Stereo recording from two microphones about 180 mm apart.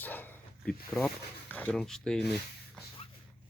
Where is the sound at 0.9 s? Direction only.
5° left (ahead or behind).